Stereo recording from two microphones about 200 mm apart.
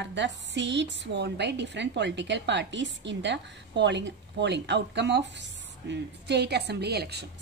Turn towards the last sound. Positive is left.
turn(degrees=-55)  # may be behind; listen again after turning